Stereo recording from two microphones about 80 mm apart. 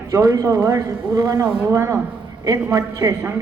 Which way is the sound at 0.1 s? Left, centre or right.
Right.